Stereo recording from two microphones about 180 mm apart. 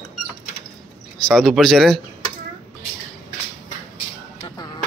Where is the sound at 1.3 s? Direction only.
Centre (ahead or behind).